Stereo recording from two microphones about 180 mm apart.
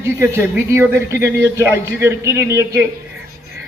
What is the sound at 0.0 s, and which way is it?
A man's voice, 15° right (ahead or behind).